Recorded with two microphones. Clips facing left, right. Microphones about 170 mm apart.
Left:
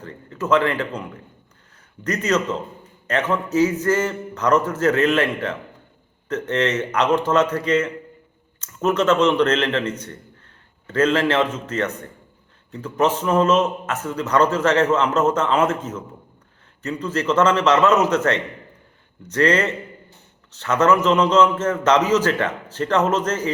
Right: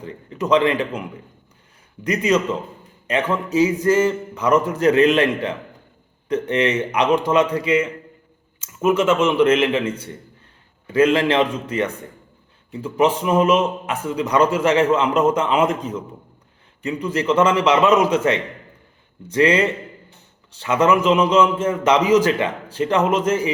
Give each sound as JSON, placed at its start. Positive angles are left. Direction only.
{"t": 0.0, "sound": "a man's voice", "side_deg": -15}
{"t": 2.0, "sound": "a man's voice", "side_deg": -10}